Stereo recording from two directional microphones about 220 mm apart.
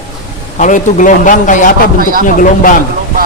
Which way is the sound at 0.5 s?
35° left (ahead or behind).